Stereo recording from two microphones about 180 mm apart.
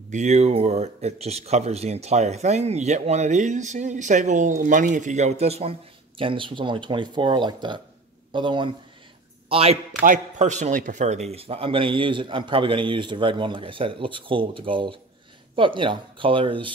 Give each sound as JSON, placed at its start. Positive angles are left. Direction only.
{"t": 0.1, "sound": "speech", "side_deg": -40}
{"t": 10.0, "sound": "a man's voice", "side_deg": -45}